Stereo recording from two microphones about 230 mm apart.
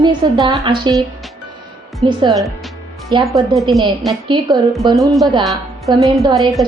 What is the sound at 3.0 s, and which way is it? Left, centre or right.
A woman's voice, centre.